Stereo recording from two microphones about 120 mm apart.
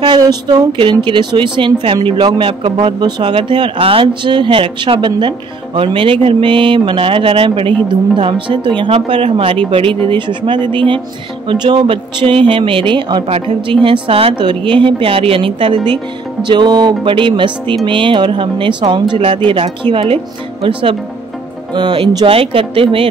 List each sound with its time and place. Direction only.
0.0 s speech: 35° right (ahead or behind)
21.7 s speech: 40° right (ahead or behind)